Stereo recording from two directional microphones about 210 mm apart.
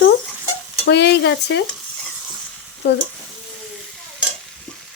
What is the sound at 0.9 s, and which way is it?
Speech, 55° left (ahead or behind).